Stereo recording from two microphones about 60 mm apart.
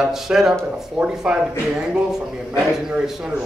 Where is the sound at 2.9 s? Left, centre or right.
Centre.